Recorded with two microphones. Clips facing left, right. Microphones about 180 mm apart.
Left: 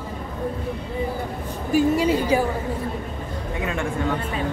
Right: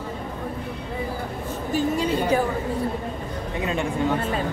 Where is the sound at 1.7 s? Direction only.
10° left (ahead or behind).